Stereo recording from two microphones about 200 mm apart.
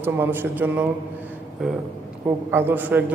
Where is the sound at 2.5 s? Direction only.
10° right (ahead or behind).